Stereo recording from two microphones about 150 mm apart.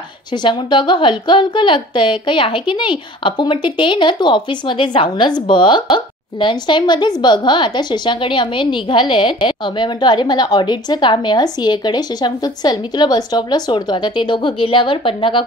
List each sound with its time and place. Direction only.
0.3 s speech: 30° left (ahead or behind)